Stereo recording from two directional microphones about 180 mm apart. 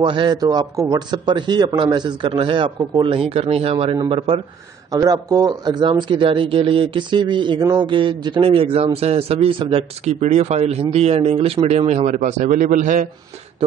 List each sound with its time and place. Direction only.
0.0 s a man's voice: 25° right (ahead or behind)
2.8 s speech: 20° right (ahead or behind)
3.1 s a man's voice: 30° right (ahead or behind); by 13.1 s 50° right (ahead or behind)